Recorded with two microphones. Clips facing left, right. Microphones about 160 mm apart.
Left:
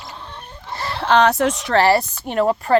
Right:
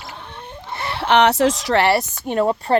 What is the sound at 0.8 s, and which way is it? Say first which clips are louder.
Chicken: even; 25° right (ahead or behind).